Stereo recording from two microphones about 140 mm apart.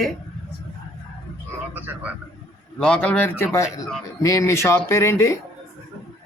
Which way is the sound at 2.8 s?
10° left (ahead or behind).